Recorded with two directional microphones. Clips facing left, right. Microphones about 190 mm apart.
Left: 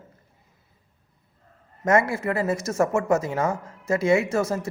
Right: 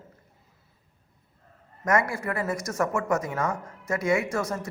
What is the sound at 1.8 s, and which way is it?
Speech, 25° left (ahead or behind).